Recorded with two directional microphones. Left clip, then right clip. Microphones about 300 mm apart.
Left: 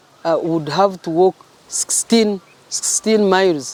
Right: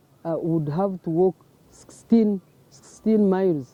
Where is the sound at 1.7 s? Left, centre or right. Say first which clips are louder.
Left 7 dB; centre.